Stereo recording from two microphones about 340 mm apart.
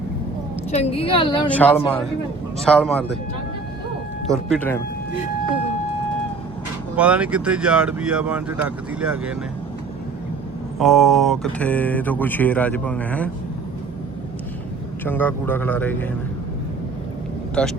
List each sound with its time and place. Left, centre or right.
0.7 s a woman's voice: centre
1.5 s speech: centre
4.3 s speech: centre
6.9 s speech: centre
10.8 s speech: centre
15.0 s speech: centre
17.6 s speech: centre